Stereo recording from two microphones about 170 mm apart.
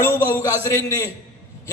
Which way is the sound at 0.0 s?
15° left (ahead or behind).